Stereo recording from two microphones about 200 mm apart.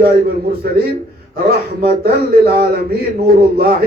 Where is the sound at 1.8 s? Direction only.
50° right (ahead or behind).